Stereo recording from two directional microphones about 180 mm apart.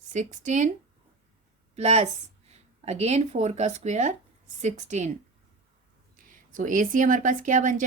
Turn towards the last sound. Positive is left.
turn(degrees=-45)  # may be behind; listen again after turning